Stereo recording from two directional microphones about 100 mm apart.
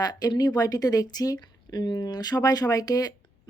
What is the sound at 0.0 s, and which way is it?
A woman's voice, 40° left (ahead or behind).